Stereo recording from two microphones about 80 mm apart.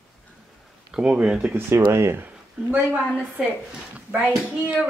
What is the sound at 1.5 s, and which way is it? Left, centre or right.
Speech, right.